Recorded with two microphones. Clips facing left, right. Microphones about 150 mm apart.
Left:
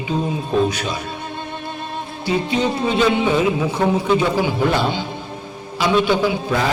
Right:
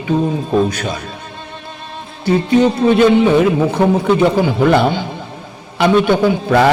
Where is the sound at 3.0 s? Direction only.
55° right (ahead or behind).